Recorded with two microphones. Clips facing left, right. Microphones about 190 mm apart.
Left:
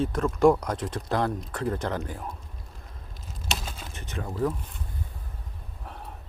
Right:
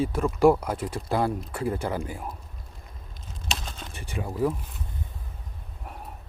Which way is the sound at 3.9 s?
10° right (ahead or behind).